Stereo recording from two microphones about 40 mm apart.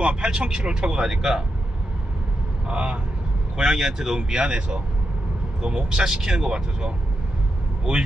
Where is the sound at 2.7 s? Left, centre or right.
Right.